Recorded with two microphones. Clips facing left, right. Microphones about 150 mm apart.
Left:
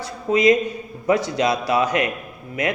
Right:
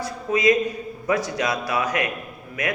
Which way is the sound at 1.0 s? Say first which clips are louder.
Left 4 dB; 25° left (ahead or behind).